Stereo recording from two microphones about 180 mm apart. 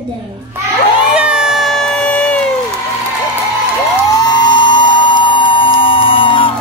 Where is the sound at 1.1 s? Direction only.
5° right (ahead or behind).